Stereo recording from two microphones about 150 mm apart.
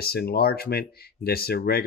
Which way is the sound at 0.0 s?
90° left.